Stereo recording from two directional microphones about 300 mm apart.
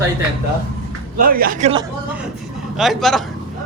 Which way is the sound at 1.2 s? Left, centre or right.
Right.